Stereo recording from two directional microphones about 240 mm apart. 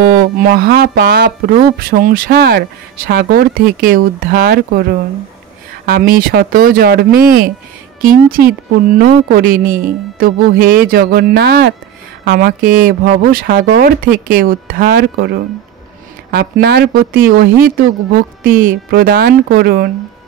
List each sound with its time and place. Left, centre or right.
0.0 s a woman's voice: right
5.9 s a woman's voice: right